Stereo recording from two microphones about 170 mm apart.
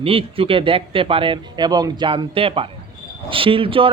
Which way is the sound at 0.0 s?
35° right (ahead or behind).